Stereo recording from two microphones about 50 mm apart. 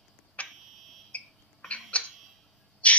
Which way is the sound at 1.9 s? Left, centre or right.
Left.